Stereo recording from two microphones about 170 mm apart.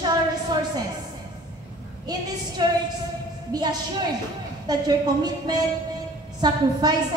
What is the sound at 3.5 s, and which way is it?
Music, 25° right (ahead or behind).